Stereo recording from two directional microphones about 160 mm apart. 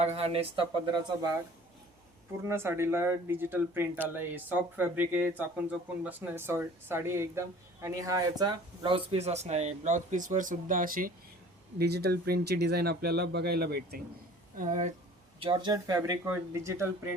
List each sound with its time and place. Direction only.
0.0 s speech: 40° right (ahead or behind)
2.4 s speech: 15° right (ahead or behind); by 11.1 s 60° right (ahead or behind)
11.8 s speech: 90° right
14.5 s speech: 55° right (ahead or behind)
15.4 s speech: 30° right (ahead or behind)